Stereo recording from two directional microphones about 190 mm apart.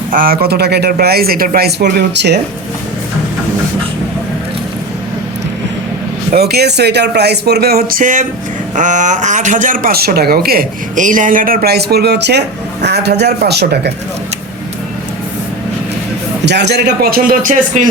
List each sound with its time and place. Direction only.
0.1 s speech: 50° right (ahead or behind)
6.3 s speech: 55° right (ahead or behind)
16.5 s speech: 65° right (ahead or behind); by 17.8 s 45° right (ahead or behind)